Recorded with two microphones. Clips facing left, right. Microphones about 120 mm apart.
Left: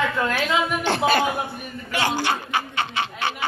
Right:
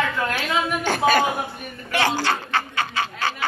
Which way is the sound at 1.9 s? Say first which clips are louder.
Right 1 dB; 15° left (ahead or behind).